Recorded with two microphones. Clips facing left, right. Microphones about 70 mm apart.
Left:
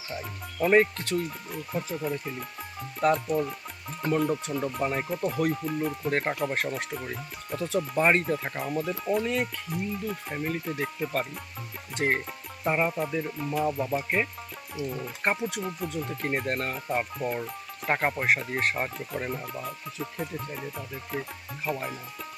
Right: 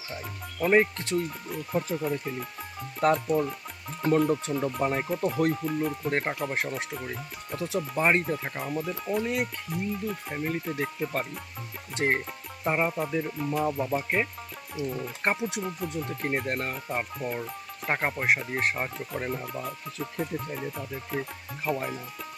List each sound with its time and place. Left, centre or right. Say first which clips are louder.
0.1 s speech: left 2 dB; centre
9.2 s speech: left 1 dB; centre
9.6 s speech: even; centre
12.0 s speech: even; centre
15.4 s speech: even; centre
16.0 s speech: even; centre